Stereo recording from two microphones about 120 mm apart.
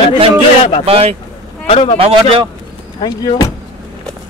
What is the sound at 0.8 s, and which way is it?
Speech, 55° right (ahead or behind).